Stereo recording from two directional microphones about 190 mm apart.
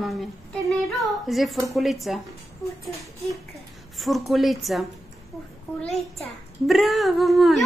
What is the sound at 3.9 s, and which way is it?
A child's voice, centre (ahead or behind).